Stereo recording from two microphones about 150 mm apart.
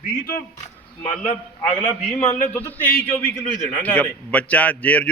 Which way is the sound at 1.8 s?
15° left (ahead or behind).